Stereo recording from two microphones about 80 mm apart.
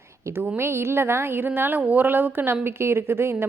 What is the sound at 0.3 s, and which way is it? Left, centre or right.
Speech, right.